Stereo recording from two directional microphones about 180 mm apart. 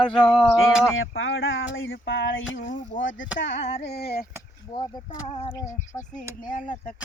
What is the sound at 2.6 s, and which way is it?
Speech, 45° left (ahead or behind).